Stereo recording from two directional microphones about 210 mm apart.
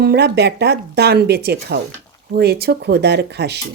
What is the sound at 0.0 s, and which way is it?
Speech, 50° right (ahead or behind).